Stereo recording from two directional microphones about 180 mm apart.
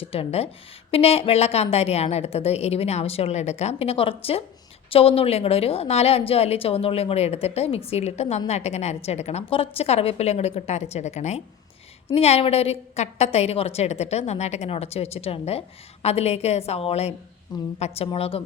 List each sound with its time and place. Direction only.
0.0 s a woman's voice: 30° left (ahead or behind)